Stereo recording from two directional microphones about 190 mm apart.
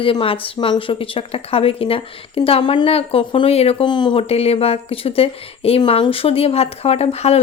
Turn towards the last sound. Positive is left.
turn(degrees=35)  # may be behind; listen again after turning